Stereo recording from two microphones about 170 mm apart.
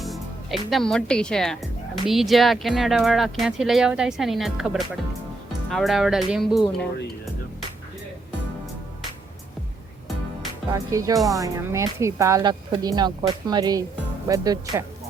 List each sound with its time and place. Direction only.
0.0 s speech: centre (ahead or behind)
10.7 s speech: 20° right (ahead or behind)